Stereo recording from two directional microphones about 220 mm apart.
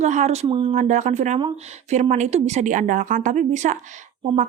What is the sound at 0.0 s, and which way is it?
A woman's voice, 30° right (ahead or behind).